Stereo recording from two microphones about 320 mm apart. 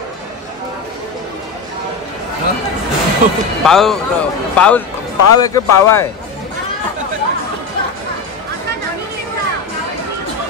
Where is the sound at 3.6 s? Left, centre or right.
Centre.